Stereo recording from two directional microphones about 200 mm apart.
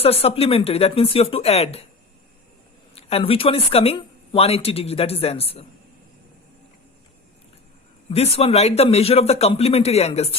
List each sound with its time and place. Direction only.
0.0 s speech: 30° left (ahead or behind)
2.9 s speech: 30° left (ahead or behind)
8.1 s a man's voice: 30° left (ahead or behind)